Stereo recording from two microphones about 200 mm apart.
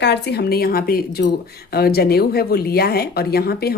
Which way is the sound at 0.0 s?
55° left (ahead or behind).